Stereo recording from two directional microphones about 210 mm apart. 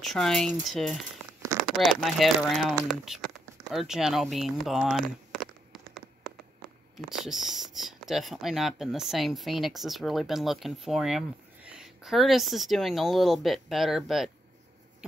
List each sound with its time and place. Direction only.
0.0 s speech: centre (ahead or behind)
2.7 s a sound: 5° right (ahead or behind)
7.1 s speech: centre (ahead or behind)